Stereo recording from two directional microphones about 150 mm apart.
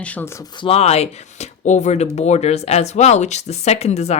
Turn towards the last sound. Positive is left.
turn(degrees=45)  # may be behind; listen again after turning